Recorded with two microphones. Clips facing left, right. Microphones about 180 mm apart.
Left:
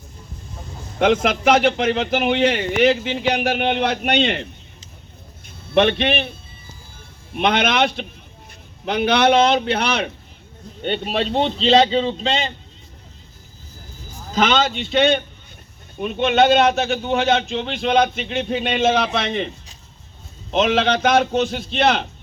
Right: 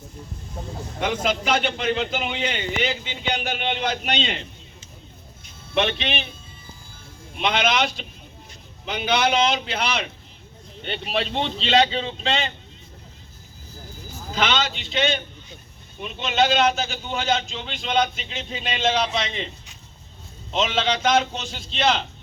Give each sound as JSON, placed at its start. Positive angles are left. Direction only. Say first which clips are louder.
{"t": 0.9, "sound": "a man's voice", "louder": "left 7 dB", "side_deg": 70}
{"t": 5.7, "sound": "a man's voice", "louder": "left 7 dB", "side_deg": 55}
{"t": 7.3, "sound": "a man's voice", "louder": "left 4 dB", "side_deg": 60}
{"t": 10.8, "sound": "a man's voice", "louder": "left 5 dB", "side_deg": 40}
{"t": 14.3, "sound": "a man's voice", "louder": "left 6 dB", "side_deg": 45}
{"t": 20.6, "sound": "a man's voice", "louder": "left 6 dB", "side_deg": 60}